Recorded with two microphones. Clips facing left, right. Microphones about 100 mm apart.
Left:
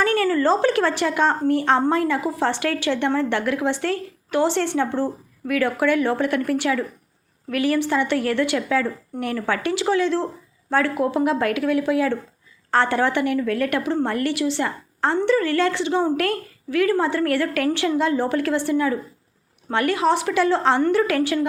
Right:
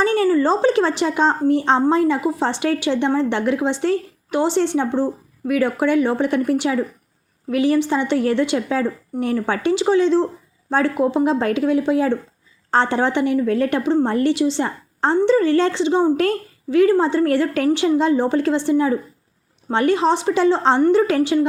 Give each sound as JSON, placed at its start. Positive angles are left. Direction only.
{"t": 0.0, "sound": "speech", "side_deg": -20}